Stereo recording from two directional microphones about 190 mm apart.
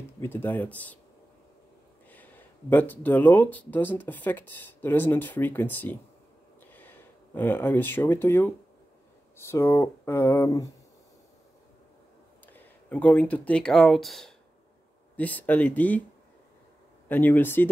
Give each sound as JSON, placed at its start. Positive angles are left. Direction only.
{"t": 0.2, "sound": "speech", "side_deg": 10}
{"t": 2.0, "sound": "speech", "side_deg": 10}
{"t": 12.5, "sound": "speech", "side_deg": 10}
{"t": 17.1, "sound": "speech", "side_deg": 10}